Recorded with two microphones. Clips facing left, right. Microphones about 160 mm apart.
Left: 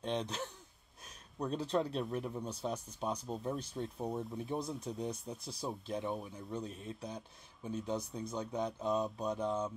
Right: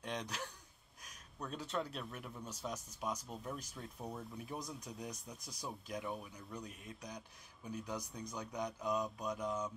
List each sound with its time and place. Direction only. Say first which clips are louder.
0.0 s speech: left 6 dB; 25° left (ahead or behind)